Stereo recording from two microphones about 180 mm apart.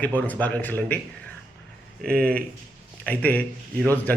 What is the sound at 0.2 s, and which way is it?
Speech, 10° left (ahead or behind).